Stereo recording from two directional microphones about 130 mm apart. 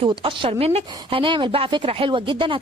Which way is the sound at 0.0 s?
40° right (ahead or behind).